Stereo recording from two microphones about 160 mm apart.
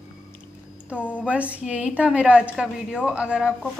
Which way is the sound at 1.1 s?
10° right (ahead or behind).